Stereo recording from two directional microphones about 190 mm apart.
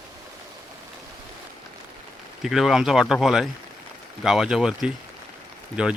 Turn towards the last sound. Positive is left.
turn(degrees=-5)  # may be behind; listen again after turning